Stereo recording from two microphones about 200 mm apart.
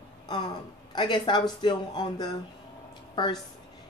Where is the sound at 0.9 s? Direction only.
25° left (ahead or behind).